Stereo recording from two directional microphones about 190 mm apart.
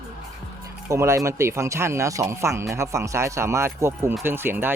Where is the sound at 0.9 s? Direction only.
15° right (ahead or behind).